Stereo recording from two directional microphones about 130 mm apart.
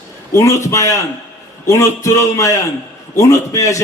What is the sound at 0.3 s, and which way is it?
A man's voice, 25° left (ahead or behind).